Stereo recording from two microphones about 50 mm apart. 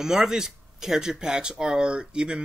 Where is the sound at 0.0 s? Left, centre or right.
Centre.